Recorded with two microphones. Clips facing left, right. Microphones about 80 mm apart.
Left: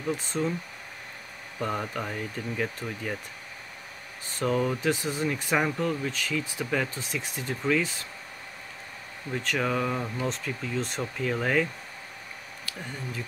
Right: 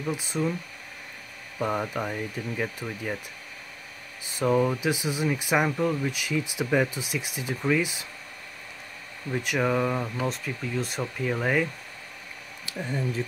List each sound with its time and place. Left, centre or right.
0.1 s speech: centre
1.6 s speech: centre
4.4 s speech: centre
9.3 s speech: centre
12.7 s a sound: right